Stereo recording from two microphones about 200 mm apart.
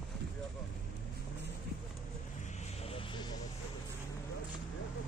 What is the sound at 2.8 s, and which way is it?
Vehicle, 25° left (ahead or behind).